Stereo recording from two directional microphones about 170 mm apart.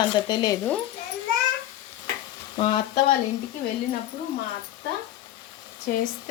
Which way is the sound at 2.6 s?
35° left (ahead or behind).